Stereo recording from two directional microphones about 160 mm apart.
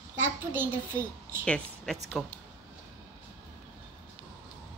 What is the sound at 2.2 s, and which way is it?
Speech, 5° right (ahead or behind).